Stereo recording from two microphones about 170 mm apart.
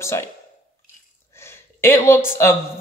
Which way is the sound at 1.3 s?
15° left (ahead or behind).